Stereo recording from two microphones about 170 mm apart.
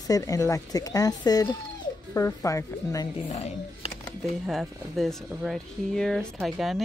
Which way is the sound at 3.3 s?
40° left (ahead or behind).